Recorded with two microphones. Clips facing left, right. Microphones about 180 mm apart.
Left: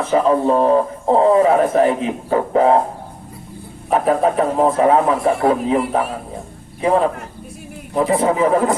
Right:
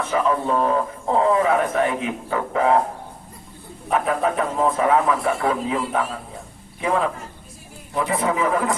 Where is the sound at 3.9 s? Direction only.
35° left (ahead or behind).